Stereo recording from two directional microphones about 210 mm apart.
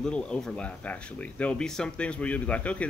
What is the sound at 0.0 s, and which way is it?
Speech, 5° left (ahead or behind).